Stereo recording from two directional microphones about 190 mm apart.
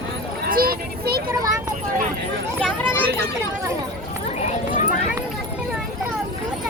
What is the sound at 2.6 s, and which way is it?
Children playing, 10° left (ahead or behind).